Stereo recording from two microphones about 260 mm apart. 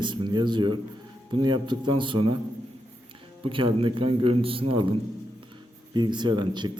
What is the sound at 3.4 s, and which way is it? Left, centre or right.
A man's voice, centre.